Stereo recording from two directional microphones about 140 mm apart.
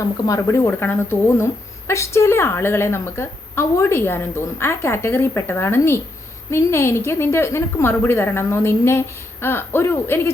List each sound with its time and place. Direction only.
0.0 s a woman's voice: 20° left (ahead or behind)